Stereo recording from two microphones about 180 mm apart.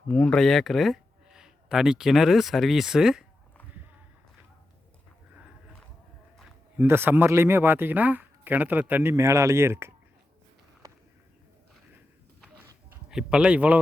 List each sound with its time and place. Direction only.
0.1 s speech: 5° left (ahead or behind)
6.7 s speech: 10° right (ahead or behind)
10.8 s a sound: 20° right (ahead or behind)
13.1 s speech: 5° right (ahead or behind)